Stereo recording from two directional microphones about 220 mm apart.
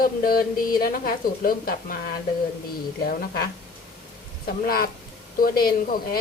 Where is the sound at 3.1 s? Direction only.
45° left (ahead or behind).